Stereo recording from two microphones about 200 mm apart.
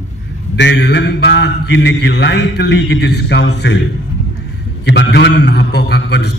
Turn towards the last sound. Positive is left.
turn(degrees=60)  # may be behind; listen again after turning